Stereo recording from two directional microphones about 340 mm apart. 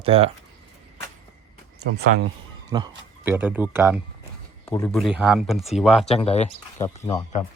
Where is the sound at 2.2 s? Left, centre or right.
Centre.